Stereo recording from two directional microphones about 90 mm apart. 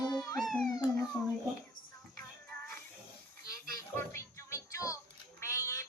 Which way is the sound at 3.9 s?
35° left (ahead or behind).